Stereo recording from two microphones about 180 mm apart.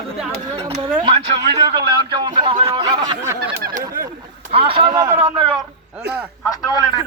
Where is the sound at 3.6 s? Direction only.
50° right (ahead or behind).